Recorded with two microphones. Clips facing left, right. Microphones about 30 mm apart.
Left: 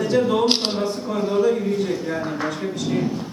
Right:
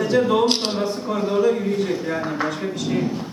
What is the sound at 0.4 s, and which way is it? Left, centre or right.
Speech, centre.